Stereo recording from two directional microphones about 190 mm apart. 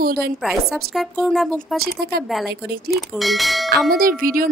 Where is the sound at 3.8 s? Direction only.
50° right (ahead or behind).